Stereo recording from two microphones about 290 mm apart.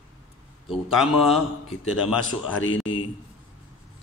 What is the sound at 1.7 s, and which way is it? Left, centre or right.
Speech, left.